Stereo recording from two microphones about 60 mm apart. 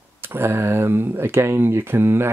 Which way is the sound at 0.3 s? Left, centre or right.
Right.